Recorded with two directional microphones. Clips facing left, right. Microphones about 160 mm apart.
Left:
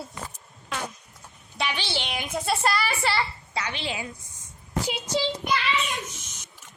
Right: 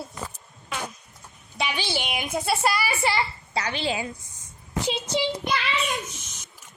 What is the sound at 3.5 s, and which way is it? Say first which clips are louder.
Speech: right 4 dB; 35° right (ahead or behind).